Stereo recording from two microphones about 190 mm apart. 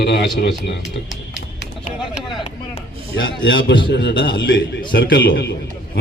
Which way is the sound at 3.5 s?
65° left (ahead or behind).